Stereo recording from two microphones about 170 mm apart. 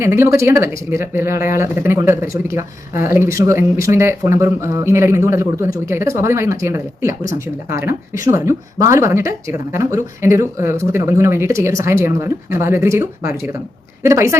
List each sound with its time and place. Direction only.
0.0 s speech: 15° right (ahead or behind)